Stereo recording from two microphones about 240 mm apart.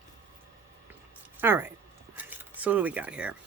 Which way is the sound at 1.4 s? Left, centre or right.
Centre.